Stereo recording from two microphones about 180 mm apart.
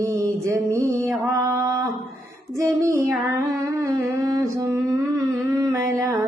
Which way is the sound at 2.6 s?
15° right (ahead or behind).